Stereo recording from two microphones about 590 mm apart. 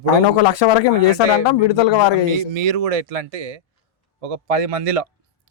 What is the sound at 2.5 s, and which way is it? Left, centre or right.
Speech, right.